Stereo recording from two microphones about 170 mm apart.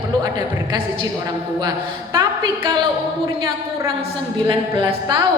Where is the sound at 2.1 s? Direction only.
25° right (ahead or behind).